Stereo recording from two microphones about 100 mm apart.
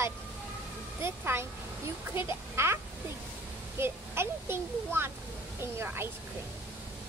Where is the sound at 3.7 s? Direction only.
25° right (ahead or behind).